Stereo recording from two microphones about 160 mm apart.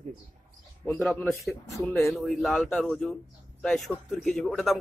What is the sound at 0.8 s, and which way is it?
Speech, 10° left (ahead or behind).